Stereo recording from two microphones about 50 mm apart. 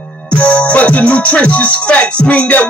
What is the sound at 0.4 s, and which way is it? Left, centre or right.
Music, left.